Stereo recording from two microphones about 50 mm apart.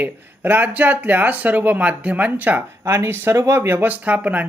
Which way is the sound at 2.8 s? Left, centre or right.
Right.